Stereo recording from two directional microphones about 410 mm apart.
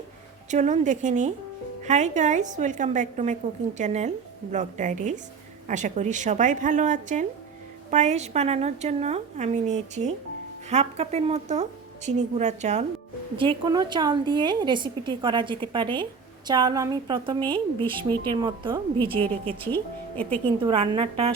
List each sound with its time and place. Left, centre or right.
0.5 s a woman's voice: centre
19.1 s speech: centre
20.7 s a woman's voice: centre